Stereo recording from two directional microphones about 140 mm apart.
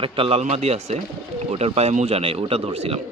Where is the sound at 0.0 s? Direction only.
40° right (ahead or behind).